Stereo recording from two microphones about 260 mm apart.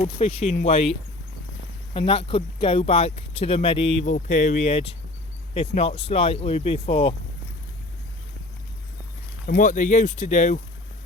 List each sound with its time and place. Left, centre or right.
0.0 s speech: left
9.5 s speech: left